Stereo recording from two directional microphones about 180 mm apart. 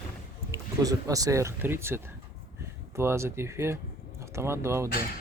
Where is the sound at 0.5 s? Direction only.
20° right (ahead or behind).